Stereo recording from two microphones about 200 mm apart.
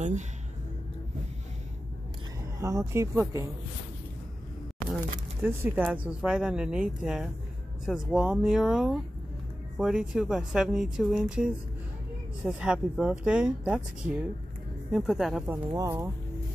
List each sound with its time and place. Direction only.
2.6 s speech: 15° right (ahead or behind)
4.8 s a sound: 10° right (ahead or behind)
5.9 s speech: 5° right (ahead or behind)
15.5 s speech: 15° right (ahead or behind)